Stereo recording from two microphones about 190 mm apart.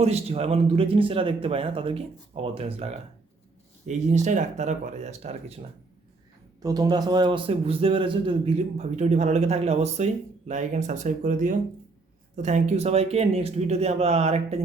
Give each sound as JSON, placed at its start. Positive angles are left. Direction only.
{"t": 0.0, "sound": "a man's voice", "side_deg": -35}
{"t": 6.6, "sound": "a man's voice", "side_deg": -20}